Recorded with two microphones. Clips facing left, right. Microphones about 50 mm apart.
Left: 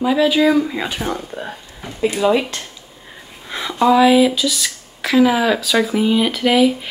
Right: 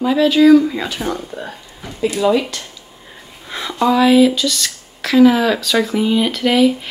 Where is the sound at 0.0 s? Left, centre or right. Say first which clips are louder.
Right 3 dB; centre.